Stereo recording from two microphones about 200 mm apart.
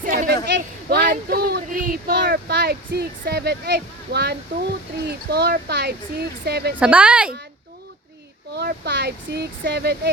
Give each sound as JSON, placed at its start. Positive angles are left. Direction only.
{"t": 0.0, "sound": "a sound", "side_deg": -40}
{"t": 0.4, "sound": "speech", "side_deg": -55}
{"t": 6.7, "sound": "a woman's voice", "side_deg": -5}
{"t": 8.5, "sound": "speech", "side_deg": -55}